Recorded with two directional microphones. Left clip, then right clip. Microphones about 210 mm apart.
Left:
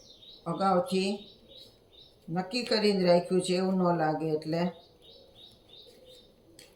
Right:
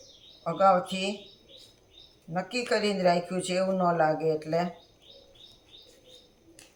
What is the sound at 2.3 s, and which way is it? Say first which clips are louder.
Speech: right 2 dB; 40° right (ahead or behind).